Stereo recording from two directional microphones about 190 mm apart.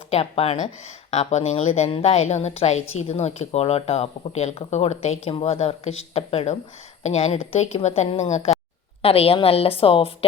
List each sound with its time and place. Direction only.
0.1 s speech: 30° left (ahead or behind)